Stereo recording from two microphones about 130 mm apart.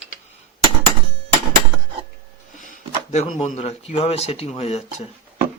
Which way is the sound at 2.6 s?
80° left.